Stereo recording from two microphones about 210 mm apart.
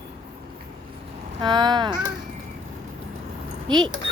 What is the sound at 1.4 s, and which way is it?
Speech, 20° right (ahead or behind).